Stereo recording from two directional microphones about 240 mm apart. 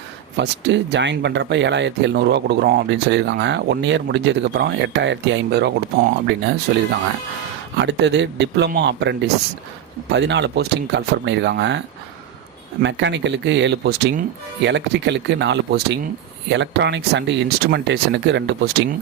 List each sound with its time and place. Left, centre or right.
0.3 s speech: right
7.8 s speech: right
12.8 s speech: right